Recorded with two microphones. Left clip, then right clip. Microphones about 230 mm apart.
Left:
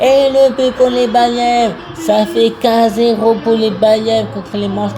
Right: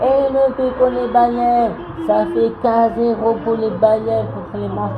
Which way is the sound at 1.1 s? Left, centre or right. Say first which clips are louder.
Even; left.